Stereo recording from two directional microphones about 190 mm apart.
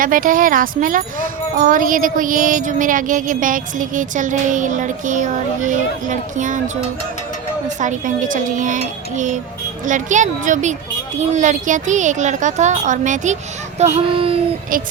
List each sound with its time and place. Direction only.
0.0 s speech: 45° right (ahead or behind)
7.8 s speech: 40° right (ahead or behind)